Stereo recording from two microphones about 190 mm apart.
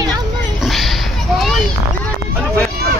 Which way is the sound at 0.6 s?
Centre (ahead or behind).